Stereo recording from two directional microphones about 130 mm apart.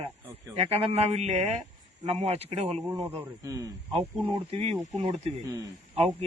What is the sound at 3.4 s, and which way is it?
Speech, 25° right (ahead or behind).